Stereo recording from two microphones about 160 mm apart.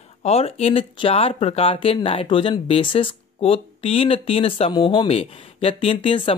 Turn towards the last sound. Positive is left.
turn(degrees=35)  # may be behind; listen again after turning